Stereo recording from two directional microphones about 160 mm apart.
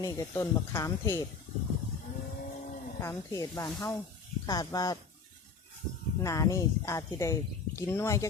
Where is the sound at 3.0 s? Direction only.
20° left (ahead or behind).